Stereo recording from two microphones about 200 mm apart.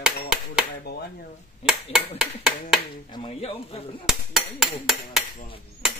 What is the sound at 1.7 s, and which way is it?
Speech, 5° right (ahead or behind).